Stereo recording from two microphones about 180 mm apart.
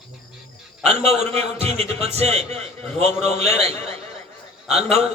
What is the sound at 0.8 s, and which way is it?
A man's voice, 35° right (ahead or behind).